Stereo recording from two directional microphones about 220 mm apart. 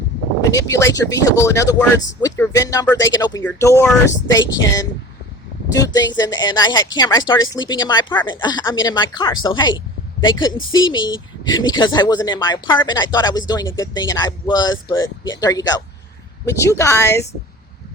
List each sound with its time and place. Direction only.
0.5 s speech: 15° left (ahead or behind)